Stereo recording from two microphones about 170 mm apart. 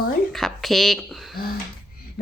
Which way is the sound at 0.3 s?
Centre (ahead or behind).